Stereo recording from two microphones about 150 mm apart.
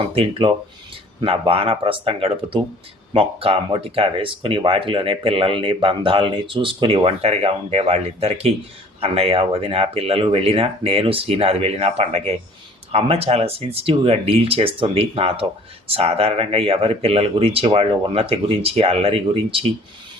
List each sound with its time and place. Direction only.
0.1 s speech: 35° right (ahead or behind)